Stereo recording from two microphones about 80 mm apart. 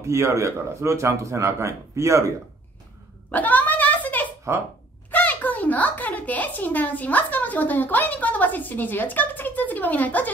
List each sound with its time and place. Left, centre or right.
0.0 s speech: right
3.3 s a sound: left
5.1 s a child's voice: left